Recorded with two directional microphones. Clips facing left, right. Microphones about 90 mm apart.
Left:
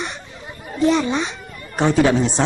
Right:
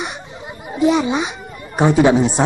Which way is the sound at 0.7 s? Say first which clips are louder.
Right 2 dB; 10° right (ahead or behind).